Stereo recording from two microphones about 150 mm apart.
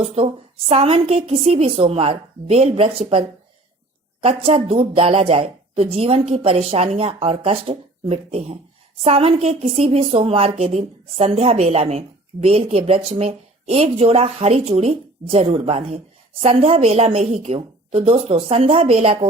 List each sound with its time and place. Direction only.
0.0 s a woman's voice: 45° right (ahead or behind)